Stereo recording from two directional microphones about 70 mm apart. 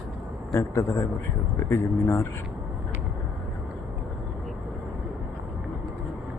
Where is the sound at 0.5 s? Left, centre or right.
Left.